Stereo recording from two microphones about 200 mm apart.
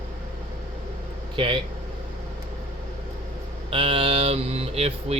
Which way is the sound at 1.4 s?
25° right (ahead or behind).